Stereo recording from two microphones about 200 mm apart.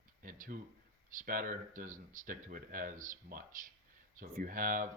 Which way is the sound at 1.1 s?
40° right (ahead or behind).